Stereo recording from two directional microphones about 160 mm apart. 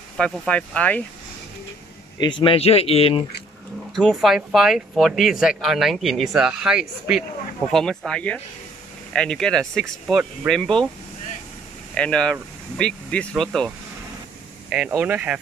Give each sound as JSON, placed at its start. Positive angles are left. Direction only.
{"t": 0.2, "sound": "speech", "side_deg": 10}
{"t": 2.1, "sound": "speech", "side_deg": 30}
{"t": 3.9, "sound": "speech", "side_deg": 0}
{"t": 11.9, "sound": "speech", "side_deg": 5}
{"t": 14.9, "sound": "speech", "side_deg": -10}